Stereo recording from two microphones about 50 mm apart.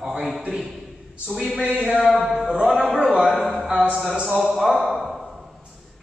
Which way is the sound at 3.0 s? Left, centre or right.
Right.